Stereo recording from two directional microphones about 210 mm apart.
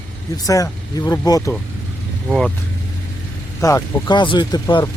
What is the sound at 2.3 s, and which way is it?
Speech, centre (ahead or behind).